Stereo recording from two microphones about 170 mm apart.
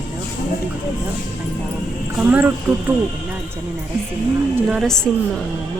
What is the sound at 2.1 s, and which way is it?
Speech, 10° right (ahead or behind).